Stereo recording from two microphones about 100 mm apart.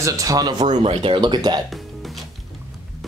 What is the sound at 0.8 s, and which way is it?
Speech, 65° right (ahead or behind).